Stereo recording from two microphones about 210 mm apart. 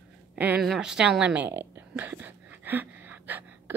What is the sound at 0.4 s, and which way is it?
A woman's voice, 5° right (ahead or behind).